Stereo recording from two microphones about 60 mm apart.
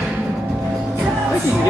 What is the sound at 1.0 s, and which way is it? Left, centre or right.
Music, centre.